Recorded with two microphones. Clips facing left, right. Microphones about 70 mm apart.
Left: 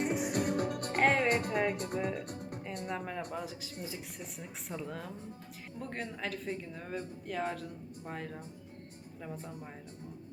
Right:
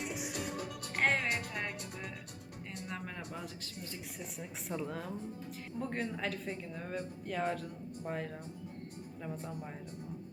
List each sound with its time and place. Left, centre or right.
0.0 s music: left
0.9 s music: centre
1.3 s speech: left
2.8 s a woman's voice: centre